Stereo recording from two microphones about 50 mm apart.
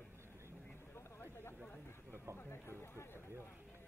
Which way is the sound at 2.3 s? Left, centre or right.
Left.